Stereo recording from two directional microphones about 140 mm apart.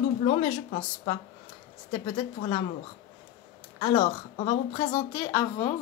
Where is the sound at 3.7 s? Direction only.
40° left (ahead or behind).